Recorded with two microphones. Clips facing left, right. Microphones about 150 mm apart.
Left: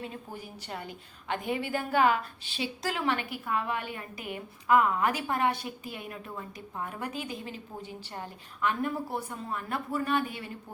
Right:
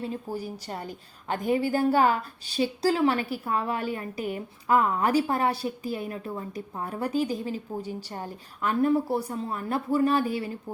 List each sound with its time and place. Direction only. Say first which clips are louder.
0.0 s a woman's voice: right 8 dB; 35° right (ahead or behind)